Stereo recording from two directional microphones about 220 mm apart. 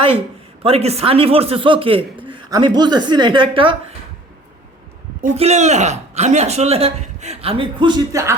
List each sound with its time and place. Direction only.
0.6 s speech: 25° right (ahead or behind)
5.2 s speech: 30° right (ahead or behind); by 8.4 s 15° right (ahead or behind)